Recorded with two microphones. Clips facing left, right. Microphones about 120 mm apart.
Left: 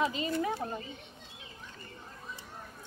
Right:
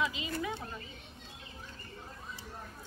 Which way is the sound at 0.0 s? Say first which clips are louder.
Left 4 dB; 40° left (ahead or behind).